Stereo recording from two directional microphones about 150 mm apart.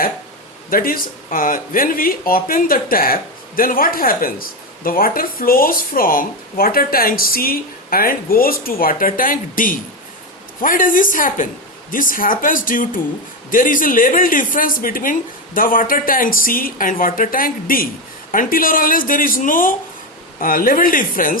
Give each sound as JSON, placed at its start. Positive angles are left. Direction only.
{"t": 0.7, "sound": "a woman's voice", "side_deg": 75}